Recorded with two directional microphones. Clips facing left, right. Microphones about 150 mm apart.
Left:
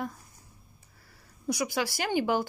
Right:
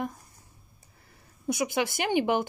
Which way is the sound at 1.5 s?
20° right (ahead or behind).